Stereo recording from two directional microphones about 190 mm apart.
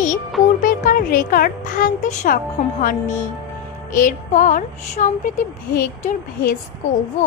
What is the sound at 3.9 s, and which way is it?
Music, 45° left (ahead or behind).